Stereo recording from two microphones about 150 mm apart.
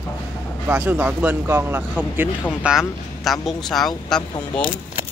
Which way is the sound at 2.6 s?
Centre (ahead or behind).